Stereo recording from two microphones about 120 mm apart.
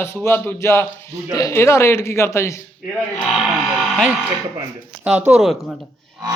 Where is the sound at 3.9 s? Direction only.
5° right (ahead or behind).